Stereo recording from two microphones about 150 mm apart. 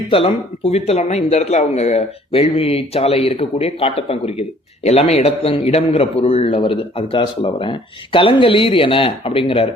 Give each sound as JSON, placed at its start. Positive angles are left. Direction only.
{"t": 0.1, "sound": "speech", "side_deg": 40}